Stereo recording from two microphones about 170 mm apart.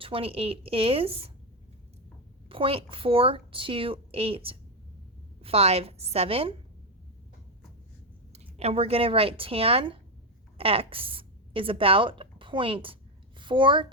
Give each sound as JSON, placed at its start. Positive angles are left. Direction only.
{"t": 0.0, "sound": "a woman's voice", "side_deg": -35}
{"t": 2.5, "sound": "a woman's voice", "side_deg": -30}
{"t": 8.3, "sound": "a child's voice", "side_deg": -40}